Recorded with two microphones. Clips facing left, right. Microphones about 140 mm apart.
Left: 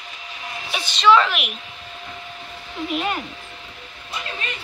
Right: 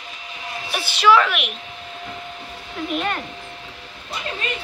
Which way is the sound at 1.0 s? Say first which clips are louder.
Even; 5° right (ahead or behind).